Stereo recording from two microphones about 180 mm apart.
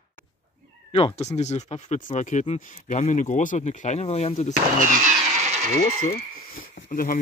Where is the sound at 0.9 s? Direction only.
35° left (ahead or behind).